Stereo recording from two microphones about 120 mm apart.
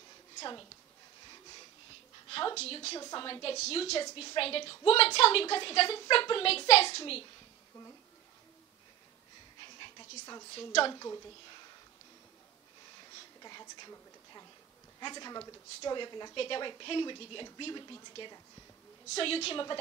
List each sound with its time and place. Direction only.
0.4 s a woman's voice: 35° left (ahead or behind)
2.2 s a woman's voice: 45° left (ahead or behind)
3.2 s speech: 45° left (ahead or behind)
3.5 s a woman's voice: 60° left (ahead or behind)
4.0 s a woman's voice: 45° left (ahead or behind)
9.6 s a sound: 40° left (ahead or behind)
10.5 s speech: 50° left (ahead or behind)
10.9 s a woman's voice: 30° left (ahead or behind)
13.4 s a sound: 35° left (ahead or behind)
15.0 s a woman's voice: 35° left (ahead or behind)
19.1 s speech: 55° left (ahead or behind)